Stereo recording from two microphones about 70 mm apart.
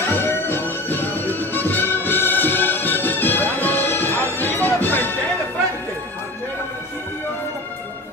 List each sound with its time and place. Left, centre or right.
0.1 s music: left